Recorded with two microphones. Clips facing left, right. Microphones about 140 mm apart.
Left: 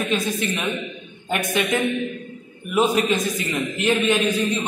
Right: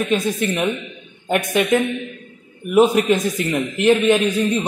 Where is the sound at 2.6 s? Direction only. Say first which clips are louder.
Right 5 dB; 60° right (ahead or behind).